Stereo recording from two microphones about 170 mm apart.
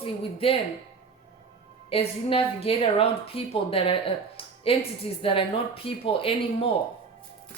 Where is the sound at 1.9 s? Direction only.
35° left (ahead or behind).